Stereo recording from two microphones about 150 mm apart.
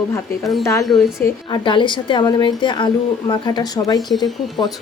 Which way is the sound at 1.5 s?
30° left (ahead or behind).